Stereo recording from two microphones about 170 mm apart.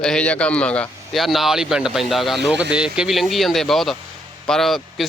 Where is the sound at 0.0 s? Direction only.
5° left (ahead or behind).